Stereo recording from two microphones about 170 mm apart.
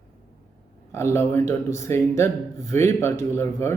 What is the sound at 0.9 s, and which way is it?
A man's voice, 15° left (ahead or behind).